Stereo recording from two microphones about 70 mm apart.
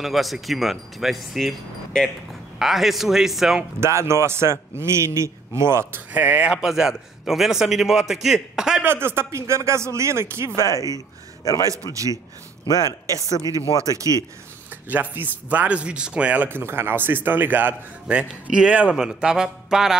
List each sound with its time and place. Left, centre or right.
0.0 s speech: centre
3.8 s a man's voice: right
6.1 s a man's voice: right
6.5 s a man's voice: centre
8.8 s a man's voice: right
10.6 s speech: left
11.7 s a man's voice: right
12.6 s speech: left
14.0 s speech: left
14.9 s a man's voice: right
16.4 s a man's voice: right
18.1 s a man's voice: centre